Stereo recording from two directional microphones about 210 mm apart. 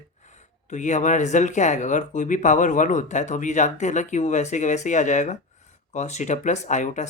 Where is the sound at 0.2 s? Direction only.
35° left (ahead or behind).